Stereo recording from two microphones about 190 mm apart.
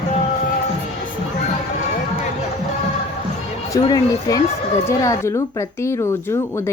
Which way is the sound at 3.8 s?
20° left (ahead or behind).